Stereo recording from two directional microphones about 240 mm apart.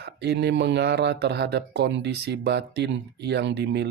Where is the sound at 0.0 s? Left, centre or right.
Right.